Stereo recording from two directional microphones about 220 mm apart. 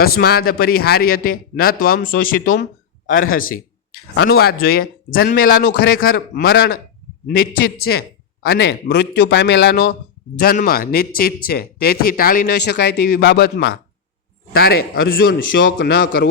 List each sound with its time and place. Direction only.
0.0 s speech: 45° left (ahead or behind)